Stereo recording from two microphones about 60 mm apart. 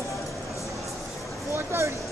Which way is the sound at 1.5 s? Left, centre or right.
Right.